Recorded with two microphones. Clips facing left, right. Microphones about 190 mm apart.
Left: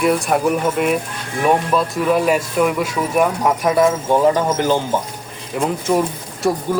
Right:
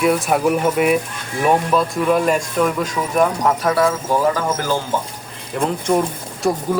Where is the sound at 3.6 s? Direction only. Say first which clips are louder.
Left 5 dB; 20° left (ahead or behind).